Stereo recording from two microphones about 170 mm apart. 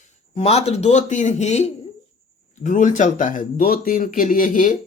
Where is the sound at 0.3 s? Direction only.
40° left (ahead or behind).